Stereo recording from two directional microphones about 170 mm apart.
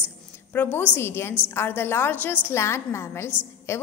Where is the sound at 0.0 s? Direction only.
10° left (ahead or behind).